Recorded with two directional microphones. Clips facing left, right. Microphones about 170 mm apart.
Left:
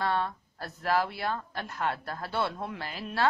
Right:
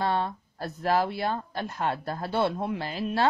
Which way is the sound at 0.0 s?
25° right (ahead or behind).